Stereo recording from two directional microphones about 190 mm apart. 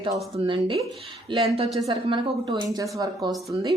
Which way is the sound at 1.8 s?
30° right (ahead or behind).